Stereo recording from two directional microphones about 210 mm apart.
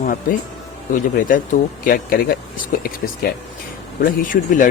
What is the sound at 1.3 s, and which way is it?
Speech, 40° left (ahead or behind).